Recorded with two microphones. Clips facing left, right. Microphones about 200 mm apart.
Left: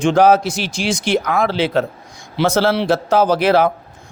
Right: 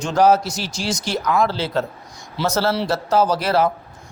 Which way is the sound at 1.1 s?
65° left (ahead or behind).